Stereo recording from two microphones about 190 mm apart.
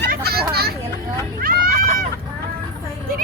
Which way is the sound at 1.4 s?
50° right (ahead or behind).